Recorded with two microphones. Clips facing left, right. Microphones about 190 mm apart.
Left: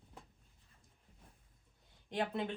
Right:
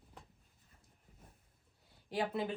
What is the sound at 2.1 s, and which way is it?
Speech, 5° right (ahead or behind).